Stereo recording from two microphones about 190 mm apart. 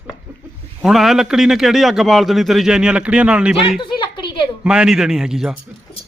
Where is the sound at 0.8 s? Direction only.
Centre (ahead or behind).